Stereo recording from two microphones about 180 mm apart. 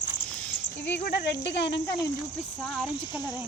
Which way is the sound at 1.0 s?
70° left (ahead or behind).